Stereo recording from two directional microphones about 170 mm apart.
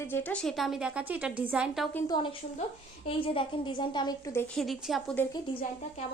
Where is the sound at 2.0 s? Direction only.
25° left (ahead or behind).